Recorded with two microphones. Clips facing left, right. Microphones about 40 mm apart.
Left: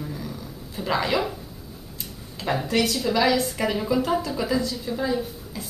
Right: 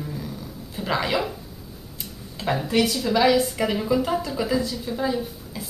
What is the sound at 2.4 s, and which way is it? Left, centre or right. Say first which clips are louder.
Speech: right 1 dB; centre.